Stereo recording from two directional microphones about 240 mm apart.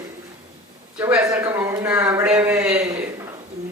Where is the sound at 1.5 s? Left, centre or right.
Centre.